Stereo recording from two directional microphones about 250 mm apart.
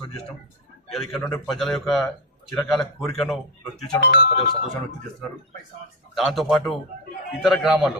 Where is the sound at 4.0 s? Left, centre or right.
Left.